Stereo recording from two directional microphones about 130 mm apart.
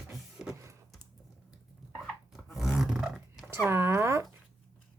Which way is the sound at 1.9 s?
5° left (ahead or behind).